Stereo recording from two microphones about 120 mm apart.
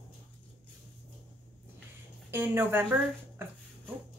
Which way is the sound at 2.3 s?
15° right (ahead or behind).